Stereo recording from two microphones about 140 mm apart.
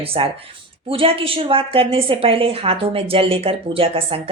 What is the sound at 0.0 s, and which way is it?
A woman's voice, 40° right (ahead or behind).